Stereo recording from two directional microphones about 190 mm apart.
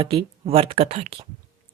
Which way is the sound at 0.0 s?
30° right (ahead or behind).